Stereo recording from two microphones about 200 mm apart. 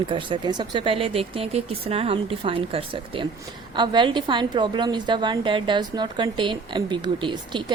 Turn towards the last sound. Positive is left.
turn(degrees=-25)  # may be behind; listen again after turning